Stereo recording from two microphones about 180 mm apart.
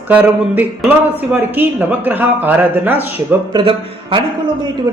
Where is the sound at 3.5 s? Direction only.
30° right (ahead or behind).